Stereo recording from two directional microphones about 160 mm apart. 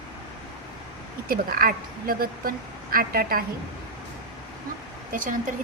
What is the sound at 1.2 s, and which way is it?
A woman's voice, 65° right (ahead or behind).